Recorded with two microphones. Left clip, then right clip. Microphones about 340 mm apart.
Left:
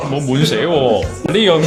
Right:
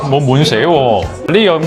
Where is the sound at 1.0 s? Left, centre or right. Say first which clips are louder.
Right 4 dB; right.